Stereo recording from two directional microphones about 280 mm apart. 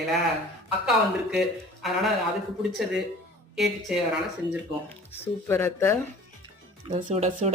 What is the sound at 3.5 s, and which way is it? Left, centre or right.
Speech, centre.